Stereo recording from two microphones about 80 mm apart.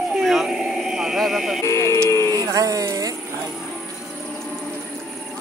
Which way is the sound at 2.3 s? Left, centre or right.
Right.